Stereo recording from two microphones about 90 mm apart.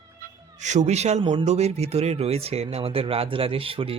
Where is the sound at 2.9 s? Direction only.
90° right.